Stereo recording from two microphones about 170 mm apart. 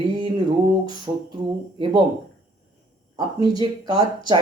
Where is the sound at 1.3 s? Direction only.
25° right (ahead or behind).